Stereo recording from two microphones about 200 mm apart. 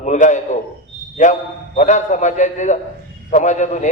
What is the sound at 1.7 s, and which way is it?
A man's voice, 35° left (ahead or behind).